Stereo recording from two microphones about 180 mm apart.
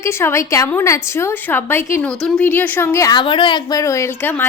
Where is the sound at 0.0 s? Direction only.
15° left (ahead or behind).